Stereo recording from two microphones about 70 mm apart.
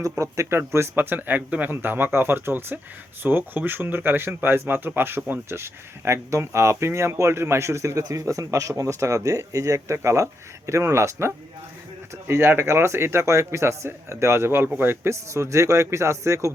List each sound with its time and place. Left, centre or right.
0.0 s speech: right